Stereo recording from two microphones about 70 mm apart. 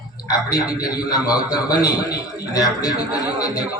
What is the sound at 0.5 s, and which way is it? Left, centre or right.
A man's voice, left.